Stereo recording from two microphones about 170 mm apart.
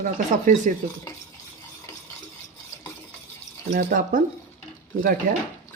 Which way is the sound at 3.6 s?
55° right (ahead or behind).